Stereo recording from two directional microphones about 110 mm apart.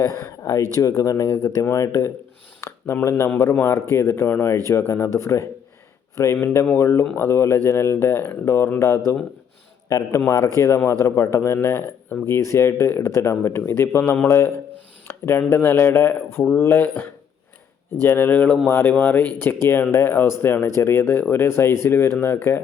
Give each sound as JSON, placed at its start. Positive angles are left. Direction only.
{"t": 0.2, "sound": "speech", "side_deg": 25}
{"t": 9.9, "sound": "speech", "side_deg": 35}
{"t": 18.0, "sound": "speech", "side_deg": 20}